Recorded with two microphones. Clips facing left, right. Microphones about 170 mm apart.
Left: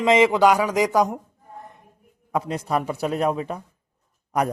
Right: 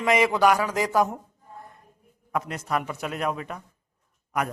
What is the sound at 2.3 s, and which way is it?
A man's voice, 30° left (ahead or behind).